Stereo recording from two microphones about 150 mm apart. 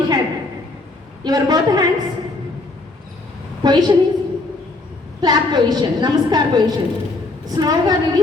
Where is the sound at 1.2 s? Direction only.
25° right (ahead or behind).